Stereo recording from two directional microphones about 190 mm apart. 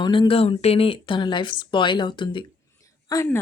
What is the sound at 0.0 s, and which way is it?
Speech, 25° left (ahead or behind).